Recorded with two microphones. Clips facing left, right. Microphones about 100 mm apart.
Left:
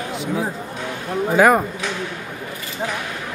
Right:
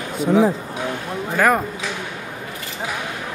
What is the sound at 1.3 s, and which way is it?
Speech, 10° left (ahead or behind).